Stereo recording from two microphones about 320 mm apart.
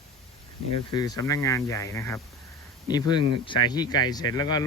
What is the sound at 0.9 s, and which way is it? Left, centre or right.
Speech, centre.